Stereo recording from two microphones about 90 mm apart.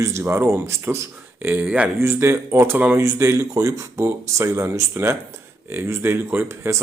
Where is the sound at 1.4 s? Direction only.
20° right (ahead or behind).